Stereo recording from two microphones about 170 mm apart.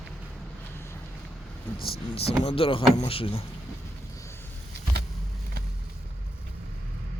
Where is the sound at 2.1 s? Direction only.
35° left (ahead or behind).